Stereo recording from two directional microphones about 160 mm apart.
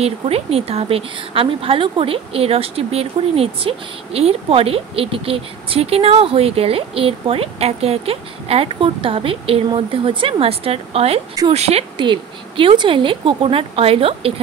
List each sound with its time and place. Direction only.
0.0 s a woman's voice: 40° right (ahead or behind)